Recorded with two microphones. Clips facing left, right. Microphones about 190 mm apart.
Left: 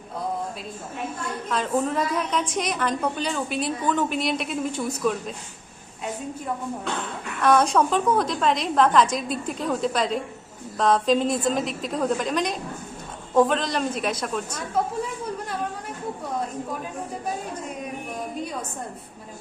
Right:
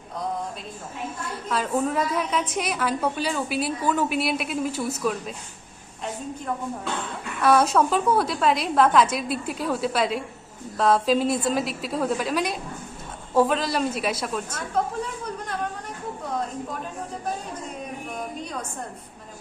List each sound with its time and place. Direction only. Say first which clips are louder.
1.5 s a woman's voice: even; 5° right (ahead or behind)
7.4 s a woman's voice: even; 5° right (ahead or behind)